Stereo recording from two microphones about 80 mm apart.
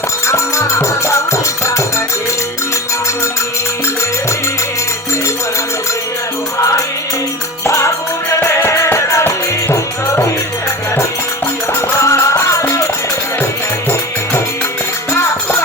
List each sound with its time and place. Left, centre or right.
0.3 s music: left
7.6 s music: left
11.9 s music: left